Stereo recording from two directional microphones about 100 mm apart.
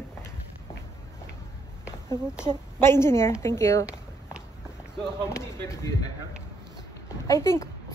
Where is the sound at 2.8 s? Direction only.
25° left (ahead or behind).